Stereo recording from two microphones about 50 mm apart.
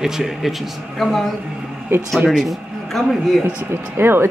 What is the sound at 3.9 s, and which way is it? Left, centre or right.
Speech, right.